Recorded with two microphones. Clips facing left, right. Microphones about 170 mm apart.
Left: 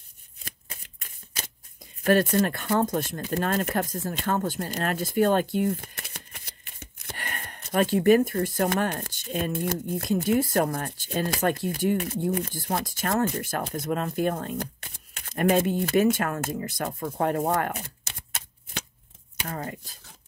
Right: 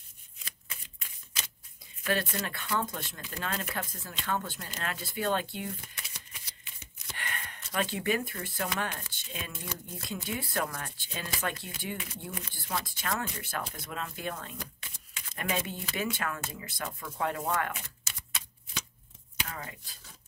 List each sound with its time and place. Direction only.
0.4 s shuffling cards: 45° left (ahead or behind)
2.0 s speech: 45° left (ahead or behind)
19.4 s speech: 45° left (ahead or behind)